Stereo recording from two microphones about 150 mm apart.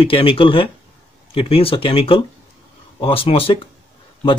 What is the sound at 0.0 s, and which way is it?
Speech, 35° left (ahead or behind).